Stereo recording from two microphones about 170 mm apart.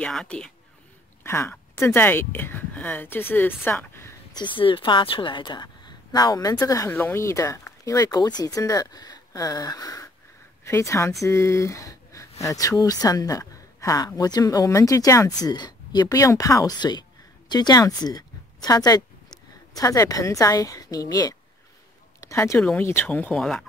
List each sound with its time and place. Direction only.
0.0 s speech: 5° left (ahead or behind)
1.2 s speech: 15° left (ahead or behind)
4.4 s a woman's voice: 30° left (ahead or behind); by 23.6 s 5° left (ahead or behind)